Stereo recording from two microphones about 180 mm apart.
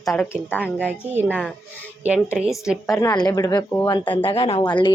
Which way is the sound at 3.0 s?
20° left (ahead or behind).